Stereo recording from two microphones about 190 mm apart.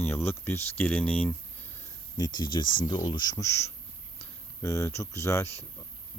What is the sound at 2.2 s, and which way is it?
Speech, 20° left (ahead or behind).